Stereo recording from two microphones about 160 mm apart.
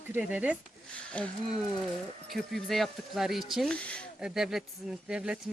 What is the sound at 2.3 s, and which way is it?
Livestock, centre (ahead or behind).